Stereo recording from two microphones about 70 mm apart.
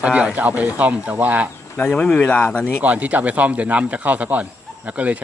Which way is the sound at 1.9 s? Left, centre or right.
Centre.